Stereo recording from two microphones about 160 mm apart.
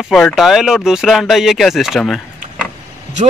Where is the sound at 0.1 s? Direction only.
Centre (ahead or behind).